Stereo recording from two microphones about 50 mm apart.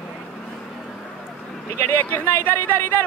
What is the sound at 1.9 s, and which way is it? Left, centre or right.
Speech, left.